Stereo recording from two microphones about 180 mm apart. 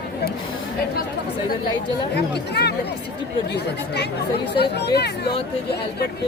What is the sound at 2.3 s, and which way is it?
Speech, 65° left (ahead or behind).